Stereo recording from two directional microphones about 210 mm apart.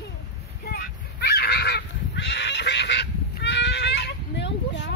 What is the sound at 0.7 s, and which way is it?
Honk, 45° left (ahead or behind).